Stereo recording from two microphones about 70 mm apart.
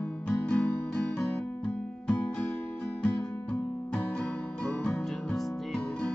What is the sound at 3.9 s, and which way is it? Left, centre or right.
Music, centre.